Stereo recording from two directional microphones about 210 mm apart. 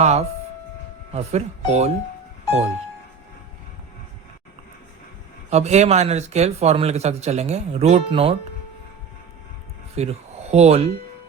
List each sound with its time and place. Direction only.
0.0 s speech: 30° right (ahead or behind)
5.5 s speech: 30° right (ahead or behind)
9.9 s speech: 30° right (ahead or behind)